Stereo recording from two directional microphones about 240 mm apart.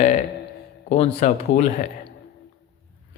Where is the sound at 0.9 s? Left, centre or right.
Left.